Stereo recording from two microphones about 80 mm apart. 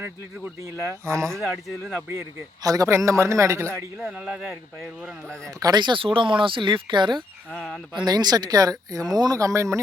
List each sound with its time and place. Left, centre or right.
1.0 s speech: right
1.4 s speech: centre
2.6 s a man's voice: right
2.9 s speech: right
4.0 s speech: centre
5.5 s a man's voice: right
5.8 s speech: right
7.5 s speech: centre
7.9 s speech: right